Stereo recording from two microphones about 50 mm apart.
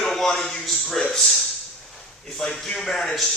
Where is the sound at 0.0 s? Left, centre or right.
Centre.